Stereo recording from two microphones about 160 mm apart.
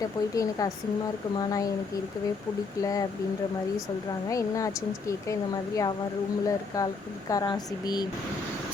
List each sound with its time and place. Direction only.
0.0 s speech: 20° left (ahead or behind)
2.8 s speech: 20° left (ahead or behind)
4.3 s speech: 20° left (ahead or behind)